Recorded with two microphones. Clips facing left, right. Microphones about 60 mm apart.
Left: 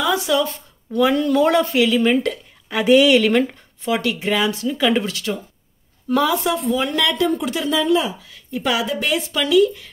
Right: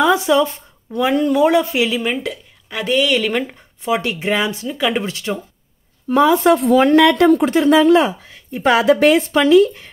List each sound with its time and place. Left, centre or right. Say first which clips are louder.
0.0 s speech: right 5 dB; right
2.0 s speech: left 4 dB; centre
3.5 s speech: right 2 dB; right
7.7 s speech: right 6 dB; right
8.2 s speech: right 4 dB; right
8.7 s a woman's voice: right 10 dB; right
9.1 s speech: right 6 dB; right